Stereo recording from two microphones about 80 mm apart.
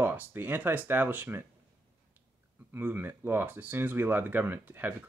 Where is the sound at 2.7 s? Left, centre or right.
Right.